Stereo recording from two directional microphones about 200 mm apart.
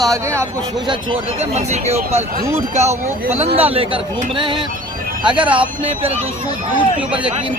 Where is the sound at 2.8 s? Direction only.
35° right (ahead or behind).